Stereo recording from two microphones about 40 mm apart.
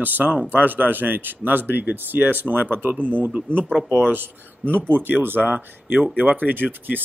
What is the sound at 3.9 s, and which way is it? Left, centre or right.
Speech, right.